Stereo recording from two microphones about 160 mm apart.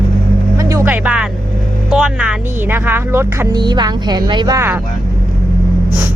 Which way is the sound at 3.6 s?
25° right (ahead or behind).